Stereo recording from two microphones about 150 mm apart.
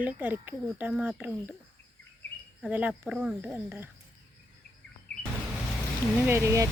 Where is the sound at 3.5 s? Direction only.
15° right (ahead or behind).